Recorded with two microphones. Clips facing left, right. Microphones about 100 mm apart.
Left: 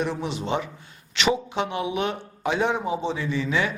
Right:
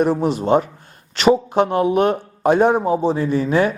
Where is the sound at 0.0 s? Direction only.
45° right (ahead or behind).